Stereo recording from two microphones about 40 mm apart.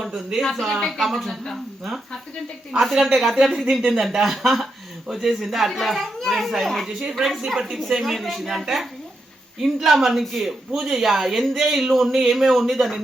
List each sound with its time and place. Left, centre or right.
0.0 s speech: centre
0.4 s speech: centre
2.7 s speech: centre
6.8 s speech: centre